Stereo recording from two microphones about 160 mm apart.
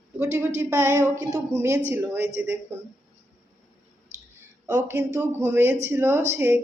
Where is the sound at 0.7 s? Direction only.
15° right (ahead or behind).